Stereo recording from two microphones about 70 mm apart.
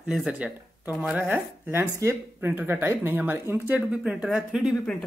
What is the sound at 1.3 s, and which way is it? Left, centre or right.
Speech, right.